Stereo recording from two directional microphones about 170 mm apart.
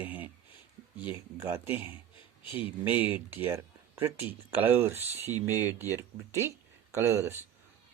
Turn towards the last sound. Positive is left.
turn(degrees=-15)  # may be behind; listen again after turning